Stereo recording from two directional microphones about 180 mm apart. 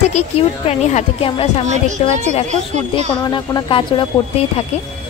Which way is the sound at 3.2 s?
25° left (ahead or behind).